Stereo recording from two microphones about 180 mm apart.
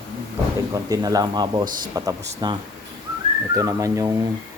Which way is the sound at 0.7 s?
20° right (ahead or behind).